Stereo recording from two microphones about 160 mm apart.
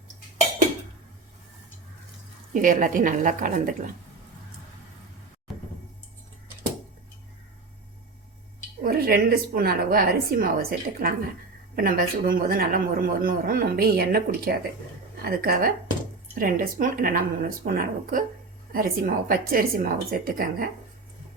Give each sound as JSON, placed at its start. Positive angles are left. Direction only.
{"t": 2.5, "sound": "a man's voice", "side_deg": -55}
{"t": 8.8, "sound": "a woman's voice", "side_deg": -70}